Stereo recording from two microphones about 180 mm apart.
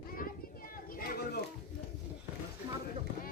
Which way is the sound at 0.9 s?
55° left (ahead or behind).